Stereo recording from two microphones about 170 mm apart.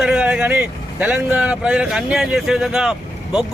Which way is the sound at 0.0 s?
5° right (ahead or behind).